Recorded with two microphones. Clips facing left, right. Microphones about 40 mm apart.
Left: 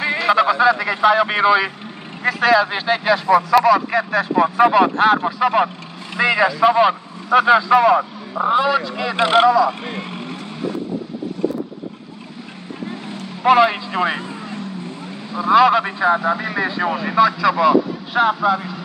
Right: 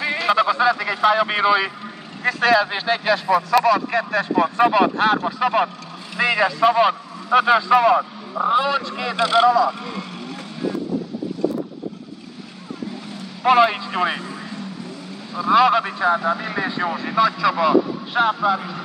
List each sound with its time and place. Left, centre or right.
0.0 s speech: centre
9.1 s speech: left
9.8 s vehicle: left
13.4 s speech: centre
15.4 s speech: centre